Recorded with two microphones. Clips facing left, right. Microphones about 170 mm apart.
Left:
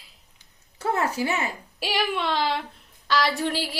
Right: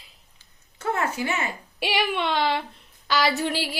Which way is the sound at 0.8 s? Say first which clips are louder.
Left 1 dB; 35° left (ahead or behind).